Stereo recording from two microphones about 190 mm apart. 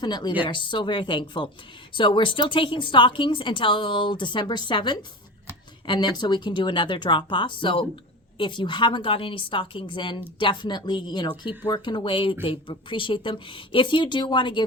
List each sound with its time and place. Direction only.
0.0 s a woman's voice: 20° left (ahead or behind)